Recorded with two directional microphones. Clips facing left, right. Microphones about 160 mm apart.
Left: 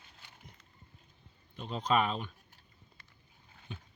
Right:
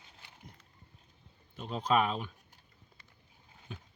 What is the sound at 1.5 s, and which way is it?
Speech, 5° right (ahead or behind).